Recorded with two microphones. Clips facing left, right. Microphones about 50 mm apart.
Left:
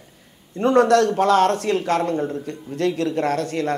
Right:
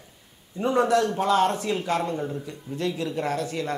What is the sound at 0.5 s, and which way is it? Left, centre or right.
Speech, left.